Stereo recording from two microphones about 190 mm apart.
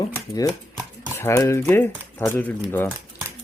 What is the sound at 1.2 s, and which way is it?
Speech, 15° left (ahead or behind).